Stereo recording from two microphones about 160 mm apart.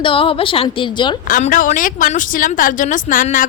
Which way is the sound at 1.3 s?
60° left (ahead or behind).